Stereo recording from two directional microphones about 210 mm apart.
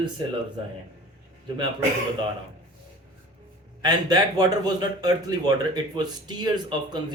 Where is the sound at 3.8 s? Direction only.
20° right (ahead or behind).